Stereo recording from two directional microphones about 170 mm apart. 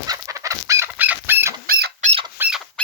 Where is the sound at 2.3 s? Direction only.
10° right (ahead or behind).